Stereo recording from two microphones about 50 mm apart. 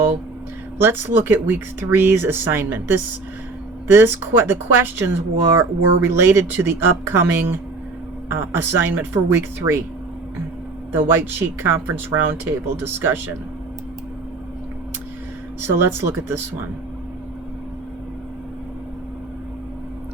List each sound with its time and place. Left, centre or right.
0.8 s speech: right
10.9 s speech: right
15.6 s speech: right